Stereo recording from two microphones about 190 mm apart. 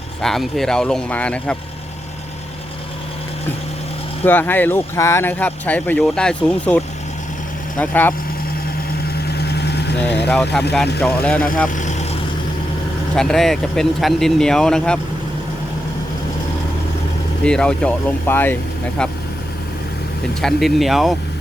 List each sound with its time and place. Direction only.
0.2 s speech: centre (ahead or behind)
4.2 s speech: 10° left (ahead or behind)
9.2 s vehicle: 60° left (ahead or behind)
10.2 s speech: 5° left (ahead or behind)
11.7 s vehicle: 40° left (ahead or behind)
13.1 s speech: centre (ahead or behind)
17.4 s speech: 5° left (ahead or behind)
20.4 s speech: centre (ahead or behind)